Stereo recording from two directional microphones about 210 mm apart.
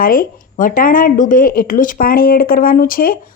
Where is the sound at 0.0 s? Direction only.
40° left (ahead or behind).